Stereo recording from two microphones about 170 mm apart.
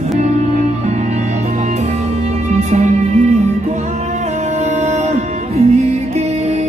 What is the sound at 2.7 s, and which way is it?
Music, 40° right (ahead or behind).